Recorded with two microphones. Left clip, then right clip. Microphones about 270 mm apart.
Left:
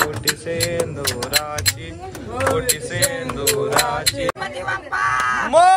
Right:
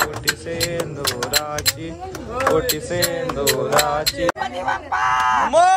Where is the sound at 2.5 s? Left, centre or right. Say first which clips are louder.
Right 1 dB; centre.